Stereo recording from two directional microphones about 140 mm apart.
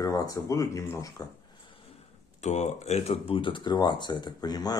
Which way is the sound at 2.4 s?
55° left (ahead or behind).